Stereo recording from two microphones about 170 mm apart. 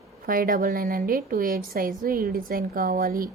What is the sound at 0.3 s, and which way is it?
A woman's voice, 55° right (ahead or behind).